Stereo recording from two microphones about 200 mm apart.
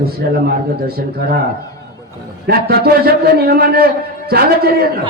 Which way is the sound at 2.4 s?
50° right (ahead or behind).